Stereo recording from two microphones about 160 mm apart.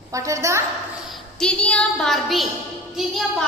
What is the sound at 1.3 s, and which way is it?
A woman's voice, 5° left (ahead or behind).